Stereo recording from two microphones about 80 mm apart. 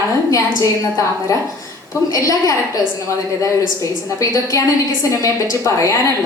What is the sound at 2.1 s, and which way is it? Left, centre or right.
Speech, left.